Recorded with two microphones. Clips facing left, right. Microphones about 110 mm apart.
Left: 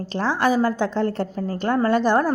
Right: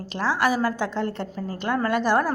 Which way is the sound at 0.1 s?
30° left (ahead or behind).